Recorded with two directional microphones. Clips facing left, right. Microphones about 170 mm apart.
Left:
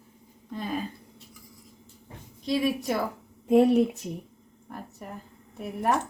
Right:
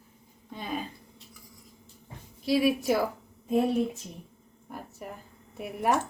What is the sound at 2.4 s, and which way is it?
Speech, 5° right (ahead or behind).